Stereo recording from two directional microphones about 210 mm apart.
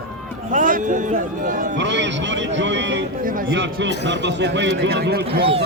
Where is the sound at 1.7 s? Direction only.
60° right (ahead or behind).